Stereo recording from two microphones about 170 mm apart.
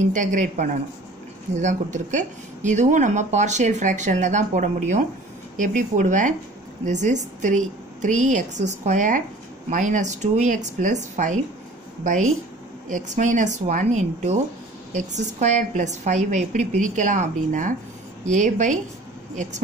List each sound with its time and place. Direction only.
0.1 s speech: 50° right (ahead or behind)